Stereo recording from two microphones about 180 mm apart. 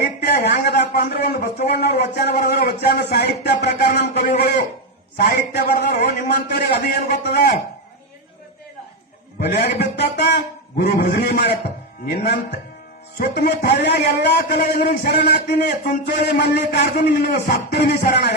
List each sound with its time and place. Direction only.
0.0 s a man's voice: 60° left (ahead or behind)
9.4 s a man's voice: 65° left (ahead or behind)
13.1 s a man's voice: 55° left (ahead or behind)
13.8 s a man's voice: 65° left (ahead or behind); by 15.1 s 45° left (ahead or behind)
15.3 s a man's voice: 60° left (ahead or behind)